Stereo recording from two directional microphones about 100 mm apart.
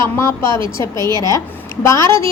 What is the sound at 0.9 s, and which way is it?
Speech, 45° right (ahead or behind).